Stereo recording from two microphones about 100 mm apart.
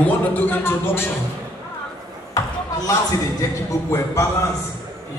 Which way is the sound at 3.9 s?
25° left (ahead or behind).